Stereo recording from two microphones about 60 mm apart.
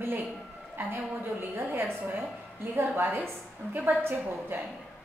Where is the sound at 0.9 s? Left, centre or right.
Right.